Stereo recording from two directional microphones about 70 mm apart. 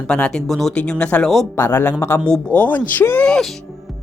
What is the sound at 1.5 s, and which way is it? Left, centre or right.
Speech, left.